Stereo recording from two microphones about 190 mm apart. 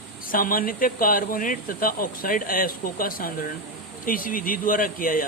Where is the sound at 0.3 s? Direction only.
50° left (ahead or behind).